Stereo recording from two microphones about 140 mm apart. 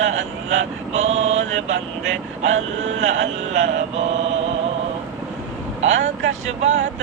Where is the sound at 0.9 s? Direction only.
55° right (ahead or behind).